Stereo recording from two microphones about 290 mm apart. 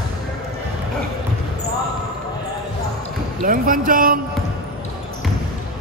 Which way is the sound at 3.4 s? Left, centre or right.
Right.